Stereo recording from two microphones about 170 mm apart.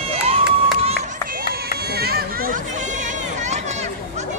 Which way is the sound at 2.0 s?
65° right (ahead or behind).